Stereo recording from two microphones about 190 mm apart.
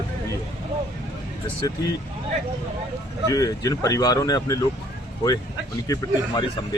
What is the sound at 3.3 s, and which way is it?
Speech, 20° left (ahead or behind).